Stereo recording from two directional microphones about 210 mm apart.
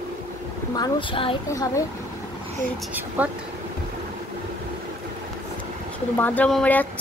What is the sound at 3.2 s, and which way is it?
Speech, 5° right (ahead or behind).